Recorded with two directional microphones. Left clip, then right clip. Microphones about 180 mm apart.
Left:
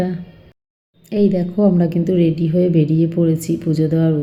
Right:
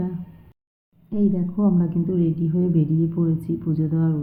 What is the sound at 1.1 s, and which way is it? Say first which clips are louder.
A woman's voice: left 8 dB; 15° left (ahead or behind).